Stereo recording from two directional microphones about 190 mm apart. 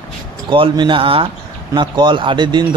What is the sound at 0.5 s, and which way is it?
Speech, 25° right (ahead or behind).